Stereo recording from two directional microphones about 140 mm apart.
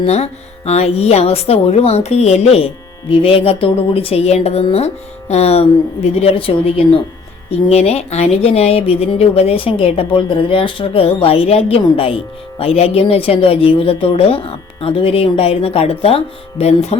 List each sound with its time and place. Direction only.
0.0 s speech: 50° left (ahead or behind)